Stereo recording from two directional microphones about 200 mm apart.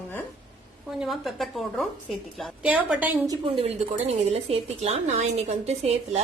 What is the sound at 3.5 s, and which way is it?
Speech, 30° right (ahead or behind).